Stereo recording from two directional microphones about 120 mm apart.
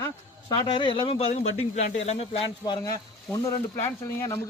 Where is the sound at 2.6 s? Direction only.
40° left (ahead or behind).